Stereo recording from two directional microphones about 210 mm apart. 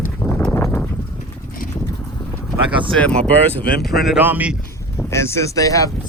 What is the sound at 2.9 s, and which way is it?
Speech, 5° left (ahead or behind).